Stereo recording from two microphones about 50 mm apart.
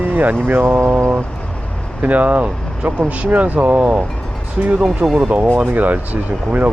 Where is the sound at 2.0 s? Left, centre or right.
Right.